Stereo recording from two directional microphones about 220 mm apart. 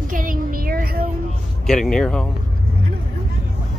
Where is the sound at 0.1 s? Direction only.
40° right (ahead or behind).